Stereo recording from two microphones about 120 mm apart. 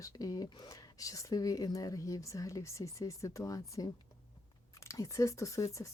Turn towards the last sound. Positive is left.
turn(degrees=30)  # may be behind; listen again after turning